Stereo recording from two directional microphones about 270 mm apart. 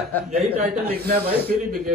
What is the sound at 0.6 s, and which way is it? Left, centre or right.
Speech, right.